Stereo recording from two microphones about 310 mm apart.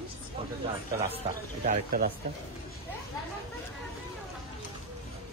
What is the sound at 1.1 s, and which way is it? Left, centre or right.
A man's voice, right.